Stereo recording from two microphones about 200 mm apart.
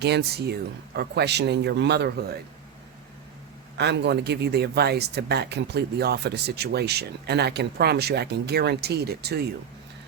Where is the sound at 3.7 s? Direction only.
60° right (ahead or behind).